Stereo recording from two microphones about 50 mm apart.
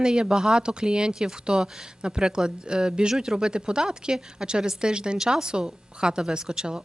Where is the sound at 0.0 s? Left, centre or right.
Centre.